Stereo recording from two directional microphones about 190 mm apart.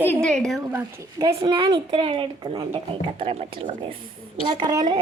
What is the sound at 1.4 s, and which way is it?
A woman's voice, 25° right (ahead or behind).